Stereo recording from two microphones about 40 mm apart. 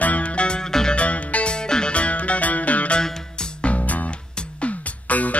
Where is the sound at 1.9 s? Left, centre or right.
Left.